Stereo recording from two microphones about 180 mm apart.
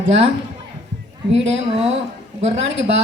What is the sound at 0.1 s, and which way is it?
Speech, 35° right (ahead or behind).